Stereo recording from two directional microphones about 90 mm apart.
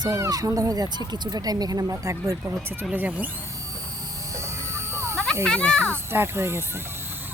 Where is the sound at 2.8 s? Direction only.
15° right (ahead or behind).